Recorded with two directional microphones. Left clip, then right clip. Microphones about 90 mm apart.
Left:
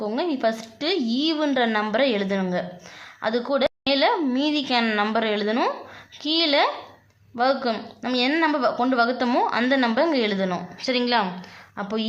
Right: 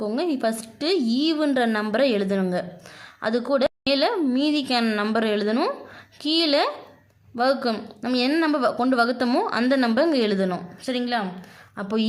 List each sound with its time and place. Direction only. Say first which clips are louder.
0.0 s a woman's voice: left 1 dB; 50° right (ahead or behind)
3.2 s a woman's voice: right 1 dB; 65° right (ahead or behind)
7.3 s a woman's voice: even; 65° right (ahead or behind)
10.8 s a woman's voice: left 4 dB; 15° right (ahead or behind)
11.8 s a woman's voice: left 1 dB; 45° right (ahead or behind)